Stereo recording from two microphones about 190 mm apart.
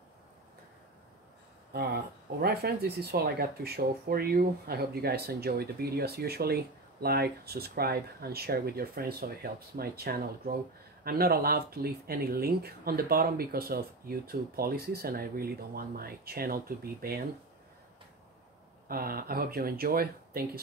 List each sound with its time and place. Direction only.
1.7 s speech: 55° right (ahead or behind)
18.9 s speech: 50° right (ahead or behind)